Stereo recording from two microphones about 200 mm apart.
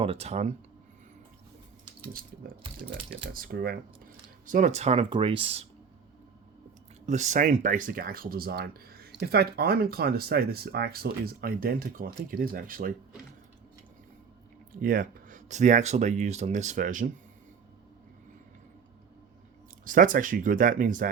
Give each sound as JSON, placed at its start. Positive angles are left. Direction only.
{"t": 0.0, "sound": "speech", "side_deg": -30}
{"t": 3.3, "sound": "speech", "side_deg": -45}
{"t": 4.4, "sound": "speech", "side_deg": -40}
{"t": 7.0, "sound": "speech", "side_deg": -35}
{"t": 14.7, "sound": "speech", "side_deg": -45}
{"t": 19.8, "sound": "speech", "side_deg": -45}